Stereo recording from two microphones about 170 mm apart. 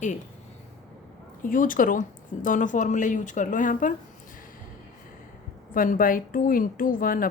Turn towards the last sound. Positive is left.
turn(degrees=55)  # may be behind; listen again after turning